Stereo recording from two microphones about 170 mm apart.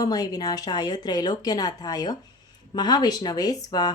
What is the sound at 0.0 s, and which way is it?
A woman's voice, 20° left (ahead or behind).